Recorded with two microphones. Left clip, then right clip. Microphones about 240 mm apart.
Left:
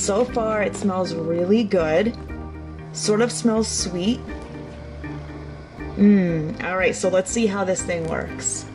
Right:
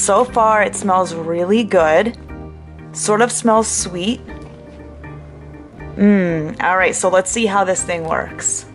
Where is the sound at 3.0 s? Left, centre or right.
Right.